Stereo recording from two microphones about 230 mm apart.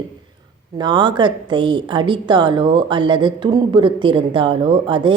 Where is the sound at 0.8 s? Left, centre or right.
Centre.